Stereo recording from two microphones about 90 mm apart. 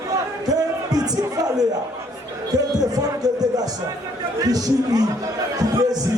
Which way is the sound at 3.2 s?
45° right (ahead or behind).